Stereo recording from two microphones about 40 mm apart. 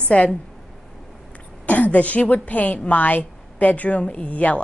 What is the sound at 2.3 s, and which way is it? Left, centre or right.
A woman's voice, left.